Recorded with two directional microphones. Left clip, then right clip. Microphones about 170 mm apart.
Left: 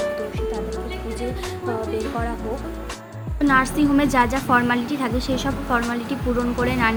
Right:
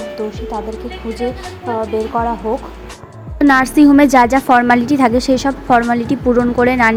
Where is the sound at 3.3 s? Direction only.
40° right (ahead or behind).